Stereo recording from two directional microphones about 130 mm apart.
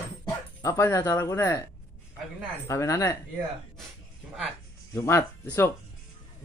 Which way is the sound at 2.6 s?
25° left (ahead or behind).